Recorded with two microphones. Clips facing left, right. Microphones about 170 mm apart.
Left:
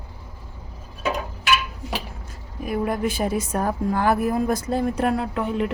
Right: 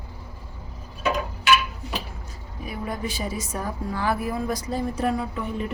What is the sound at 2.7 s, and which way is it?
A woman's voice, 55° left (ahead or behind).